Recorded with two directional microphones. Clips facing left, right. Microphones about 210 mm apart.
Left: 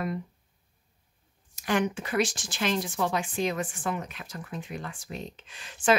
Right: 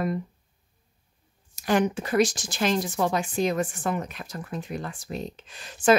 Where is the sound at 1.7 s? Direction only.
40° right (ahead or behind).